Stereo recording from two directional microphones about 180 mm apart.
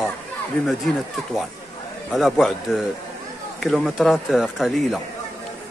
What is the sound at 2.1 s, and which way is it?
Speech, centre (ahead or behind).